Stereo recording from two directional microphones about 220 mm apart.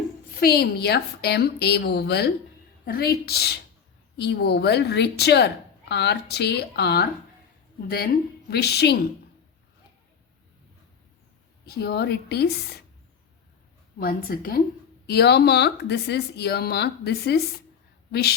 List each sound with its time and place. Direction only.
0.3 s speech: 45° left (ahead or behind)
11.6 s speech: 45° left (ahead or behind)
14.0 s speech: 40° left (ahead or behind)